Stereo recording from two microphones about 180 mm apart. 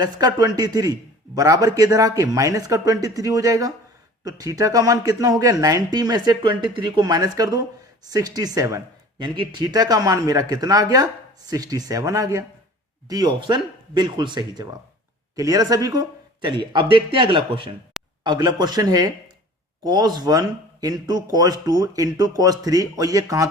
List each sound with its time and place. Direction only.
0.0 s speech: 20° right (ahead or behind)